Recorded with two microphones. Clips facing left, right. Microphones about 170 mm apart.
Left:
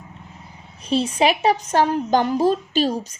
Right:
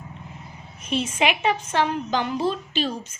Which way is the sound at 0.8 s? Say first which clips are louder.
Left 5 dB; 35° left (ahead or behind).